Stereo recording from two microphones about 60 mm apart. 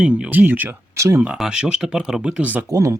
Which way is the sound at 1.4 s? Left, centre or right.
Centre.